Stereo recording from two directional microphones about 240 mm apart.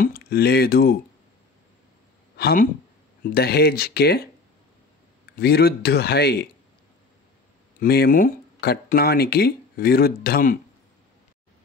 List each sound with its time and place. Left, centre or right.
0.0 s speech: left
2.3 s speech: left
7.8 s speech: left